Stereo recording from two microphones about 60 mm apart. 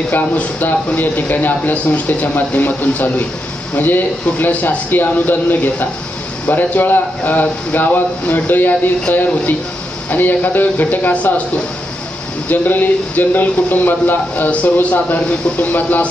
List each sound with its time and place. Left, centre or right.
0.1 s speech: left
12.4 s speech: left